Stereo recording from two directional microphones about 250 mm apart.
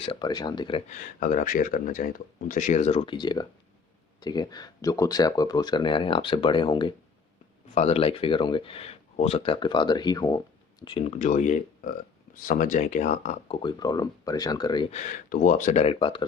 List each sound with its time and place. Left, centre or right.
0.0 s speech: centre